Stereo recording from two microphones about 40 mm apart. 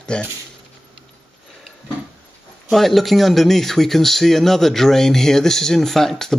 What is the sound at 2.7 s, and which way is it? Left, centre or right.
Speech, centre.